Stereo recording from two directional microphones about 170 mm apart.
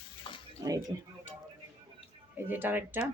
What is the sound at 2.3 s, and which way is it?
Speech, 10° right (ahead or behind).